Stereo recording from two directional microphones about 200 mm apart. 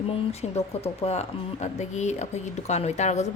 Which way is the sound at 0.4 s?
30° left (ahead or behind).